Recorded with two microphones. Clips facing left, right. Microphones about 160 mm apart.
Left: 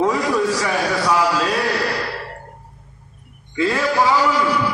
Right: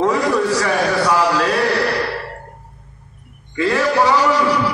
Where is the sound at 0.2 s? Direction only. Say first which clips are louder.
Right 2 dB; 70° right (ahead or behind).